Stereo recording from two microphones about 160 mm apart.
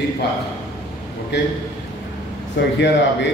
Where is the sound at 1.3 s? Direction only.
90° left.